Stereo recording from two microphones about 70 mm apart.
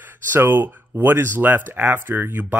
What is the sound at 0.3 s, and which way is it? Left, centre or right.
Speech, right.